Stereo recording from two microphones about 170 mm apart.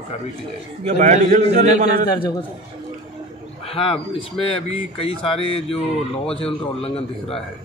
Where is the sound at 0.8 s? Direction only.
45° right (ahead or behind).